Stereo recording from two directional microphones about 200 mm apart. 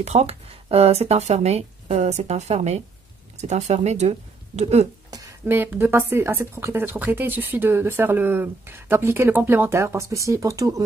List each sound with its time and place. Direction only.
0.0 s speech: 35° right (ahead or behind)
5.1 s a woman's voice: 15° right (ahead or behind)